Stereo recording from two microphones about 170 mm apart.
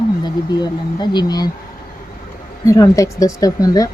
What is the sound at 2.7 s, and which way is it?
Speech, 20° left (ahead or behind).